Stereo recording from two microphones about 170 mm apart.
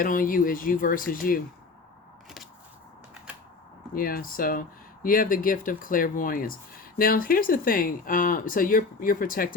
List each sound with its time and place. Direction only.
0.0 s speech: 55° left (ahead or behind)
3.9 s speech: 60° left (ahead or behind)